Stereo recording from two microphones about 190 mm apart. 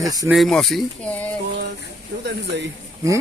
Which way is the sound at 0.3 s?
Centre (ahead or behind).